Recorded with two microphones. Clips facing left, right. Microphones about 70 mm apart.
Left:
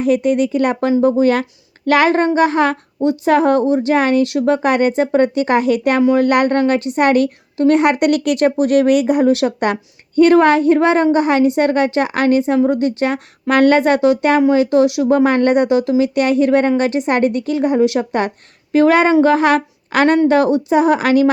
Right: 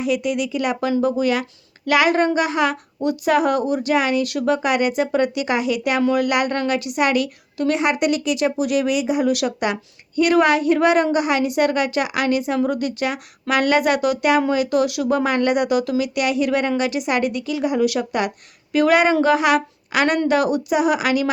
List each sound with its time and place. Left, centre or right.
0.0 s speech: left